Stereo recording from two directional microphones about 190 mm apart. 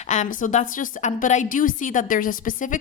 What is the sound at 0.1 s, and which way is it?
A woman's voice, 40° left (ahead or behind).